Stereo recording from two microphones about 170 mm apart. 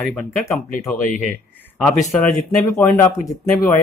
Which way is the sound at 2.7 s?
15° left (ahead or behind).